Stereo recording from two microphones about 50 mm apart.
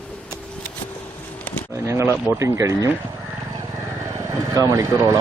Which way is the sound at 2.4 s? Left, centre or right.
Right.